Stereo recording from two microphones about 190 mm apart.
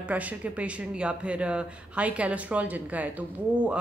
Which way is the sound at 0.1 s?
10° right (ahead or behind).